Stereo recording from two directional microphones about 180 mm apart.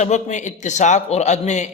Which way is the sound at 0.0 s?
40° left (ahead or behind).